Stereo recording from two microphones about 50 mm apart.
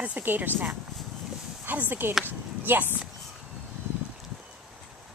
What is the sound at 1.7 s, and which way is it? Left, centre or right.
Speech, right.